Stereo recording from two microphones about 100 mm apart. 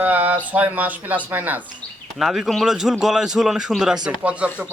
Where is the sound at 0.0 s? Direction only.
15° right (ahead or behind).